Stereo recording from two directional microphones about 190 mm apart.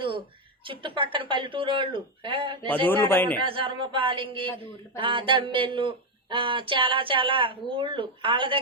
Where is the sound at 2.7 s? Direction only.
10° left (ahead or behind).